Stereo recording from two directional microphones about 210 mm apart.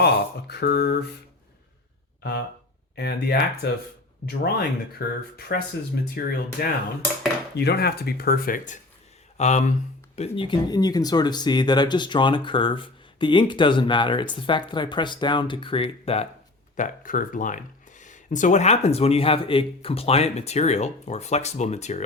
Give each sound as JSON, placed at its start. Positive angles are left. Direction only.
{"t": 0.0, "sound": "speech", "side_deg": 50}
{"t": 2.9, "sound": "speech", "side_deg": 50}
{"t": 16.7, "sound": "speech", "side_deg": 40}